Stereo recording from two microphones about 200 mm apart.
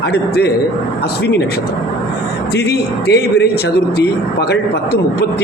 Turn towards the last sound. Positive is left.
turn(degrees=55)  # may be behind; listen again after turning